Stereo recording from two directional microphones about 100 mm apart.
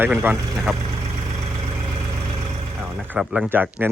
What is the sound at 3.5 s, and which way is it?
Speech, 20° right (ahead or behind).